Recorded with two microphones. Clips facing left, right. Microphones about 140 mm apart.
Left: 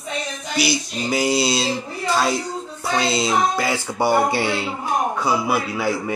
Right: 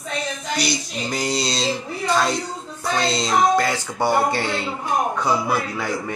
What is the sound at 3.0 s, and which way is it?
Speech, 5° left (ahead or behind).